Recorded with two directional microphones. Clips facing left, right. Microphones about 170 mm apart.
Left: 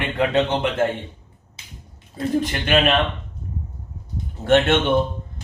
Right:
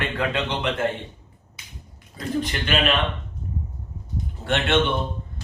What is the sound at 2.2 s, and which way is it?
Speech, 25° left (ahead or behind).